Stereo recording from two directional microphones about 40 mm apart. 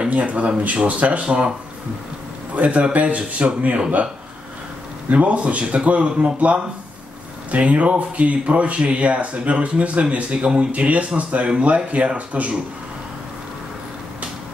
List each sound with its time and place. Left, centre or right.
0.1 s speech: right
2.5 s speech: right
5.1 s speech: right